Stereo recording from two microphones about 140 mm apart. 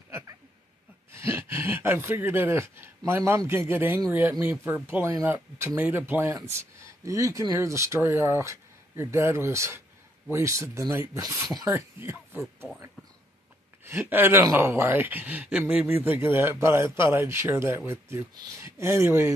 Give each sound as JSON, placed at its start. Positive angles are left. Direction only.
{"t": 1.1, "sound": "speech", "side_deg": -20}
{"t": 13.8, "sound": "speech", "side_deg": -15}